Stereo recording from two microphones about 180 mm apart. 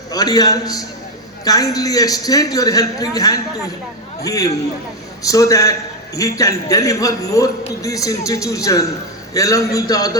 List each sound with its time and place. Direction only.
0.1 s a man's voice: 20° left (ahead or behind)